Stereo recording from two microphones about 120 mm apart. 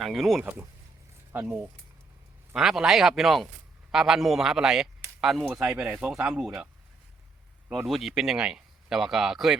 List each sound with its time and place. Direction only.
0.0 s speech: centre (ahead or behind)
0.4 s speech: 20° right (ahead or behind)
7.9 s speech: centre (ahead or behind)